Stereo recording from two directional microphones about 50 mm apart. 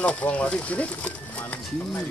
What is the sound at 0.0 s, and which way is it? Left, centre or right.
Speech, left.